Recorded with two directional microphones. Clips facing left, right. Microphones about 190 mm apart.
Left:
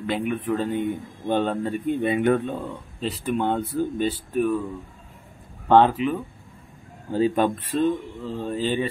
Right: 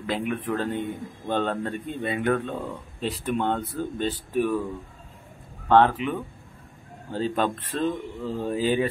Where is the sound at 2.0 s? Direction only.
20° left (ahead or behind).